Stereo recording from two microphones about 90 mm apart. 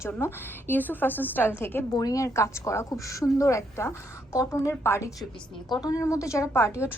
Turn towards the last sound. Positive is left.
turn(degrees=30)  # may be behind; listen again after turning